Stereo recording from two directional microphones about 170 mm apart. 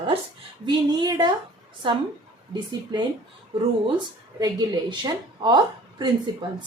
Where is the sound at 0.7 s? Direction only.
25° right (ahead or behind).